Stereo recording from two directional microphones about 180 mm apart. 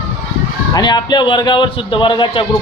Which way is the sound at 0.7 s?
25° left (ahead or behind).